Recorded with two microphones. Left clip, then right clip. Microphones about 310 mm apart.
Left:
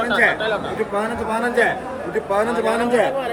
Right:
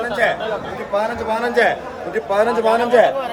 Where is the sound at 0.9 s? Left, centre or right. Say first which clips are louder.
Right 5 dB; right.